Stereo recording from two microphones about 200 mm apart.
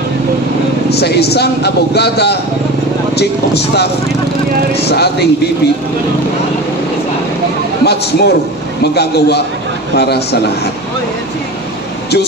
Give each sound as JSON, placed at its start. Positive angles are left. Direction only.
{"t": 0.8, "sound": "a man's voice", "side_deg": 55}
{"t": 7.8, "sound": "a man's voice", "side_deg": 55}